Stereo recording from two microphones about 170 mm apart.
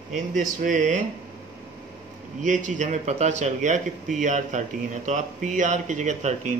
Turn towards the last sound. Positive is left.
turn(degrees=-45)  # may be behind; listen again after turning